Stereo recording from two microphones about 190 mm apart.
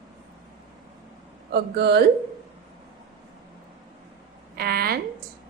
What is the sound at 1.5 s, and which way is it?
Speech, 60° right (ahead or behind).